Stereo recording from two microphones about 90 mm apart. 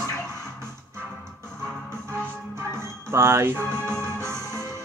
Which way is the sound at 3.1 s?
30° right (ahead or behind).